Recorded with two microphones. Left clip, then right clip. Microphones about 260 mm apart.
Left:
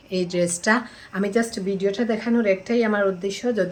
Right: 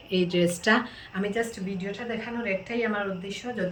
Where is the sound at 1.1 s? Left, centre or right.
Left.